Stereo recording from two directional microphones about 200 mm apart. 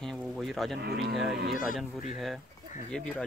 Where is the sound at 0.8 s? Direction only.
55° right (ahead or behind).